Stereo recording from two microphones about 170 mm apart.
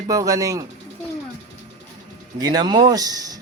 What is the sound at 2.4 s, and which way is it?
Speech, 25° right (ahead or behind).